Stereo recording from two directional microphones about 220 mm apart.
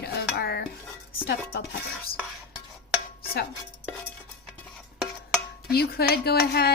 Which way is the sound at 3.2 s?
45° left (ahead or behind).